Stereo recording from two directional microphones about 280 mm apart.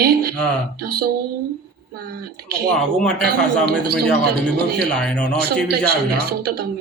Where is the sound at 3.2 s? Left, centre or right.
Right.